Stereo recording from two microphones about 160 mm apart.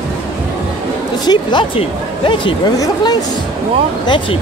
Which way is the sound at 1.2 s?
25° left (ahead or behind).